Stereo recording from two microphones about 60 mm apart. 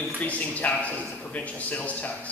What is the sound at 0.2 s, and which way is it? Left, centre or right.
A man's voice, left.